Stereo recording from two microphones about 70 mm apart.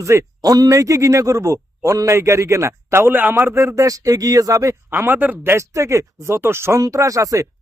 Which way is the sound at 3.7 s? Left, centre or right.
Right.